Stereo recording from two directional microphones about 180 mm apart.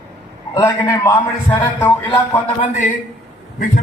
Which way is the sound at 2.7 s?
45° left (ahead or behind).